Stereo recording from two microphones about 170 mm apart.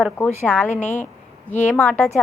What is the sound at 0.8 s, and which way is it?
Speech, 45° left (ahead or behind).